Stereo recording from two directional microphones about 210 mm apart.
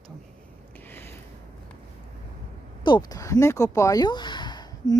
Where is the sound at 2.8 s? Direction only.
20° left (ahead or behind).